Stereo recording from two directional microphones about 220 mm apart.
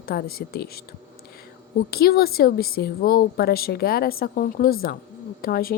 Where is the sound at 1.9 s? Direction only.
45° left (ahead or behind).